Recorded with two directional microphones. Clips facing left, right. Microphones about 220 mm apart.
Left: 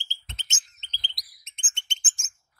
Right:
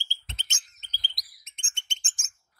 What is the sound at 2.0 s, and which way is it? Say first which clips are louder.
Bird: left 1 dB; centre (ahead or behind).